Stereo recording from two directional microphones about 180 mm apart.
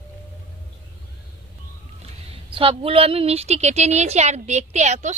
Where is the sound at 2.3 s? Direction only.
30° right (ahead or behind).